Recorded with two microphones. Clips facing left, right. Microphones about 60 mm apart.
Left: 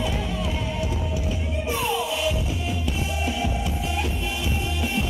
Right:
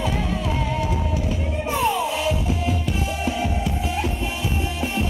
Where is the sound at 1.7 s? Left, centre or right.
Right.